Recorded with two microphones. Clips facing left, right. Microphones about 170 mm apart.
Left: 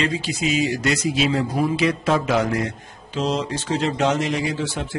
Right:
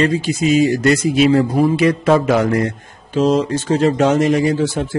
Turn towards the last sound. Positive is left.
turn(degrees=-40)  # may be behind; listen again after turning